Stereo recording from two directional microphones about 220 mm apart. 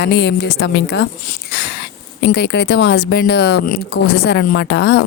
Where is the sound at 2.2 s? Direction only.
50° left (ahead or behind).